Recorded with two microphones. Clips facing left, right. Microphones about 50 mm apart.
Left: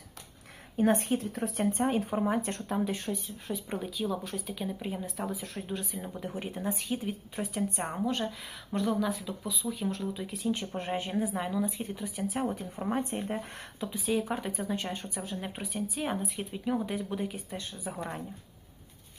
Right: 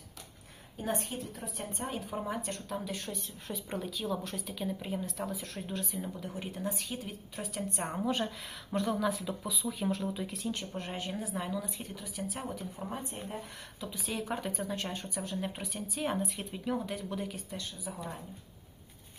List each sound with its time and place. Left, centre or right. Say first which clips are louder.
0.8 s speech: left 9 dB; left
1.7 s speech: left 9 dB; left
2.1 s speech: left 6 dB; left
3.1 s speech: left 5 dB; centre
6.1 s speech: left 3 dB; left
7.8 s speech: right 2 dB; centre
10.5 s speech: left 6 dB; left
11.9 s speech: left 6 dB; left
12.5 s speech: left 7 dB; left
13.8 s speech: left 6 dB; centre
17.5 s speech: left 2 dB; left
17.8 s speech: left 6 dB; left